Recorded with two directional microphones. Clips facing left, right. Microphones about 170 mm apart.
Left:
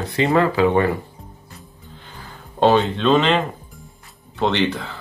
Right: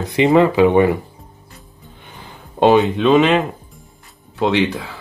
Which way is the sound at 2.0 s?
20° right (ahead or behind).